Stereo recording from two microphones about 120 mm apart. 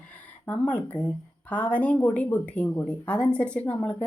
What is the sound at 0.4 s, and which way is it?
A woman's voice, 15° left (ahead or behind).